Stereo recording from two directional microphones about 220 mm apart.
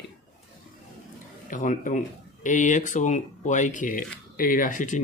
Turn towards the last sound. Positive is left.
turn(degrees=35)  # may be behind; listen again after turning